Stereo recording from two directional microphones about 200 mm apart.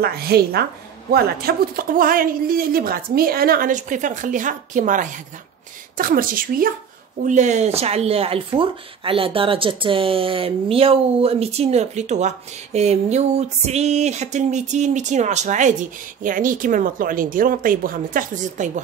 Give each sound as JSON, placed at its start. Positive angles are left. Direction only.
{"t": 0.0, "sound": "a woman's voice", "side_deg": -50}